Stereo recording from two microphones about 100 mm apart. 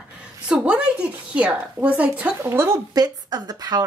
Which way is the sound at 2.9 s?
40° right (ahead or behind).